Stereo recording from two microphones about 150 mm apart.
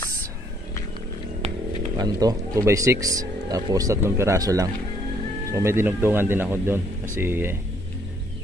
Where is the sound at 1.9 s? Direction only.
25° right (ahead or behind).